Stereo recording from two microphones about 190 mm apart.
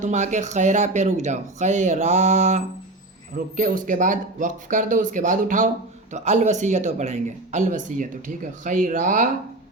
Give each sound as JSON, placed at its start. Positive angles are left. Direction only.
{"t": 0.0, "sound": "speech", "side_deg": -40}